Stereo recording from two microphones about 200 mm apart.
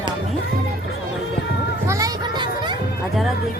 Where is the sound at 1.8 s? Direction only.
15° right (ahead or behind).